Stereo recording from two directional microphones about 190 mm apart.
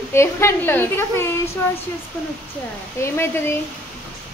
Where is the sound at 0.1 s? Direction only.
15° left (ahead or behind).